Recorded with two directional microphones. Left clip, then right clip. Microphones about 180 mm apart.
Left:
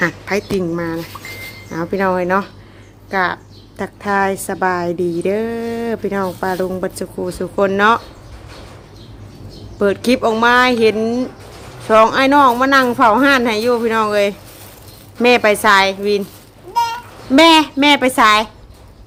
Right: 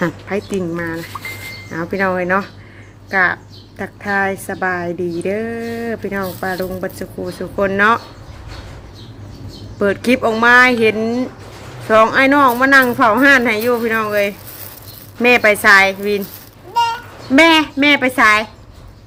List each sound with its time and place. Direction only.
0.3 s a woman's voice: 5° left (ahead or behind)
9.7 s speech: 5° left (ahead or behind)
17.3 s speech: 15° left (ahead or behind)